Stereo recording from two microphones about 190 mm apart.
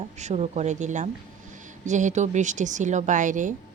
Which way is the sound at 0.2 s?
35° right (ahead or behind).